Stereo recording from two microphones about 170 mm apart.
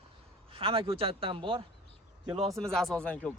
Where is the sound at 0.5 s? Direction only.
30° right (ahead or behind).